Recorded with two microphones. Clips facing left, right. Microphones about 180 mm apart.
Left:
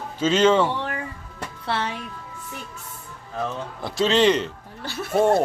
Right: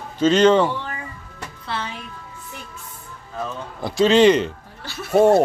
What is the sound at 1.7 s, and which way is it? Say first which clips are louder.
Speech: left 3 dB; 75° left (ahead or behind).